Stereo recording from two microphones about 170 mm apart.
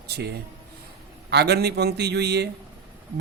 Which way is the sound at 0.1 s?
75° right (ahead or behind).